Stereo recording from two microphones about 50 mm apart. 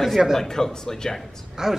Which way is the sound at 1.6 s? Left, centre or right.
Centre.